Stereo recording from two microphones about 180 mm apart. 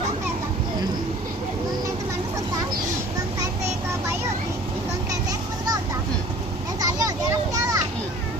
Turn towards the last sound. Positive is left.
turn(degrees=-20)  # may be behind; listen again after turning